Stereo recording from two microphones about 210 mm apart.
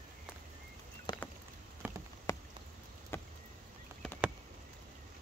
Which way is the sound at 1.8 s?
10° right (ahead or behind).